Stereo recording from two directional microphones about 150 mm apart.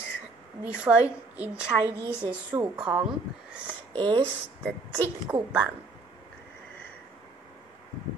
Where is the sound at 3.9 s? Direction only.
30° right (ahead or behind).